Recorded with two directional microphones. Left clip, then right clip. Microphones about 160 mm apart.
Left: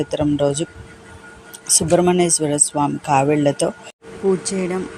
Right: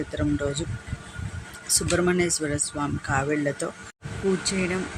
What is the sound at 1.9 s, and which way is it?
A woman's voice, 25° left (ahead or behind).